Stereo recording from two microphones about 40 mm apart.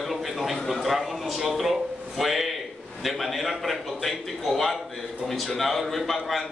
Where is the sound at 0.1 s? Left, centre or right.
Centre.